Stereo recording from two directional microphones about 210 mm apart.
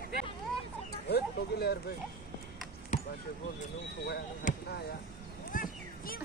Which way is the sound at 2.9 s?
35° left (ahead or behind).